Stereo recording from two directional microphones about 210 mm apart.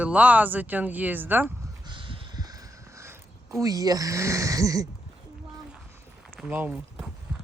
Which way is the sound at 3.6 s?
15° right (ahead or behind).